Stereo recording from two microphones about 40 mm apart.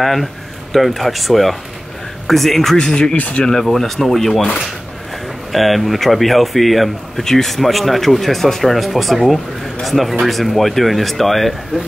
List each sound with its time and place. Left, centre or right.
0.0 s speech: centre
2.8 s speech: centre
3.2 s speech: left
3.4 s speech: centre
5.5 s speech: centre